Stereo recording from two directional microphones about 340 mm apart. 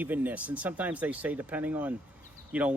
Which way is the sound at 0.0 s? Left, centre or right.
Centre.